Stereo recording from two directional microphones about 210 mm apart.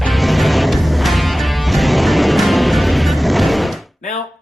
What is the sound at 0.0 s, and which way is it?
Music, centre (ahead or behind).